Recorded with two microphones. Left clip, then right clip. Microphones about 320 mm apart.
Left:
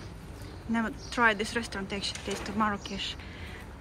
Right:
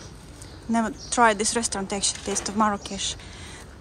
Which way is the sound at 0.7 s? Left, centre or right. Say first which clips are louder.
Right 7 dB; centre.